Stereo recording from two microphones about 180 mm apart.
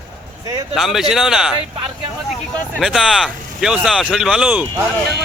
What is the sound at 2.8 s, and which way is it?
Speech, centre (ahead or behind).